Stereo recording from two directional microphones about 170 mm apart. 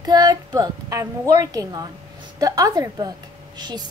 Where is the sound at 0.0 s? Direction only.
25° right (ahead or behind).